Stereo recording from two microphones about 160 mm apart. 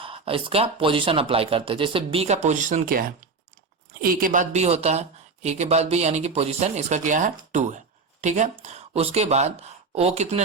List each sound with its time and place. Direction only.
0.0 s speech: 35° right (ahead or behind)